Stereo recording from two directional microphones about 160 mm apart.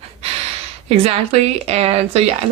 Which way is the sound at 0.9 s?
40° right (ahead or behind).